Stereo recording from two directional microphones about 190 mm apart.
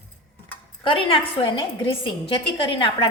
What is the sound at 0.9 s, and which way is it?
A woman's voice, 30° left (ahead or behind).